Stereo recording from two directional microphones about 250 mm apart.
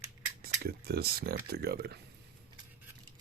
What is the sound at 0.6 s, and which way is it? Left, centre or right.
Speech, right.